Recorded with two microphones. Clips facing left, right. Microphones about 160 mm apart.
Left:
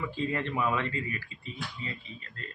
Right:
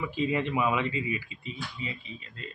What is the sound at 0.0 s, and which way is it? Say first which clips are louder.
Speech: right 3 dB; 15° right (ahead or behind).